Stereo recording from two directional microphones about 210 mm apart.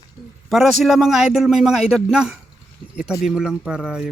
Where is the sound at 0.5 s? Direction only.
Centre (ahead or behind).